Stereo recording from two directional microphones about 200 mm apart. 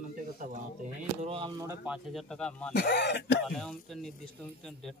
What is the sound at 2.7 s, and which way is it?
Speech, 55° left (ahead or behind).